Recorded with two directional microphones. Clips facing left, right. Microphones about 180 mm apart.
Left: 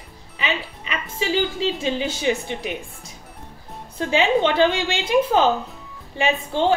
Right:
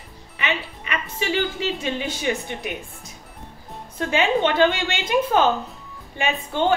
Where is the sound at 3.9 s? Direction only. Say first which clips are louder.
Left 2 dB; 30° left (ahead or behind).